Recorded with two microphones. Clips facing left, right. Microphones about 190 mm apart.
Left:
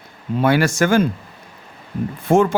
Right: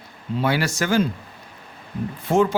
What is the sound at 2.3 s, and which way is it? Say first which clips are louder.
Speech: left 4 dB; 50° left (ahead or behind).